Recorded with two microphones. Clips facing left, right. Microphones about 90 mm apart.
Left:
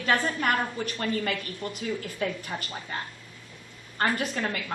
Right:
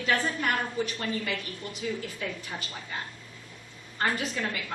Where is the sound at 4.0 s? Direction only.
45° left (ahead or behind).